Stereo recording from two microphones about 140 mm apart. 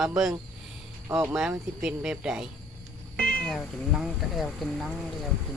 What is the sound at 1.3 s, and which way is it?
Speech, 5° right (ahead or behind).